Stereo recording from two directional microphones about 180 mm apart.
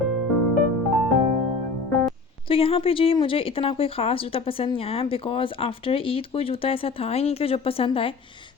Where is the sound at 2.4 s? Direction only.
30° left (ahead or behind).